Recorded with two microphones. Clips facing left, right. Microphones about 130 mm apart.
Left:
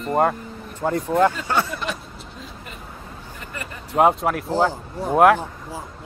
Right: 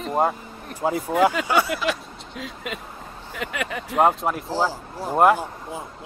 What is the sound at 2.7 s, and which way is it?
Speech, 90° right.